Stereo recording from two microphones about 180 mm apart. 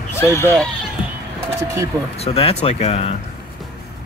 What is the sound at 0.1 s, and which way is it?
Speech, 15° left (ahead or behind).